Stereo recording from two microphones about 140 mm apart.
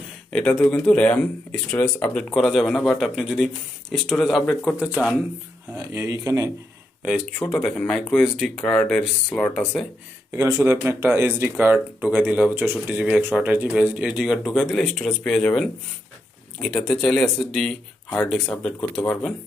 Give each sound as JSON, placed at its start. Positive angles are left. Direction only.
{"t": 0.3, "sound": "speech", "side_deg": 5}
{"t": 2.3, "sound": "speech", "side_deg": 0}
{"t": 5.7, "sound": "speech", "side_deg": -20}
{"t": 7.0, "sound": "speech", "side_deg": -5}
{"t": 10.3, "sound": "speech", "side_deg": -20}